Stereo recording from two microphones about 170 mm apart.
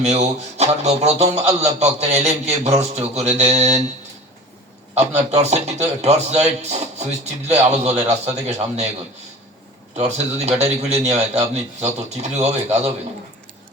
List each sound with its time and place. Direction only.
0.0 s a man's voice: 40° right (ahead or behind)
4.9 s a man's voice: 40° right (ahead or behind)
10.0 s a man's voice: 40° right (ahead or behind)